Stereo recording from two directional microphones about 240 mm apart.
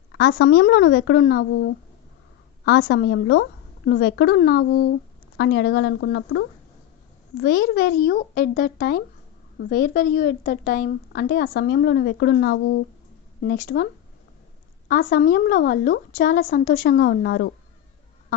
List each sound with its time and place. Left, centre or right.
0.1 s a woman's voice: left
13.4 s a woman's voice: left
14.8 s a woman's voice: left